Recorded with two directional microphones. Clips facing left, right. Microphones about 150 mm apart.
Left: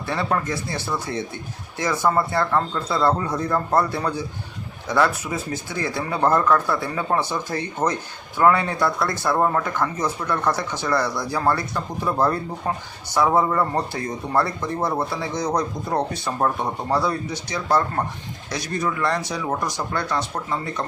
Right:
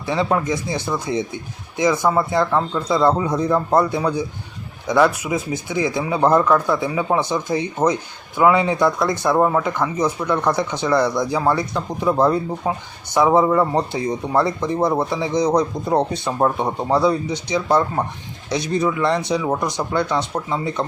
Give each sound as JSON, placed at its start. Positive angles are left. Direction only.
{"t": 0.0, "sound": "speech", "side_deg": -15}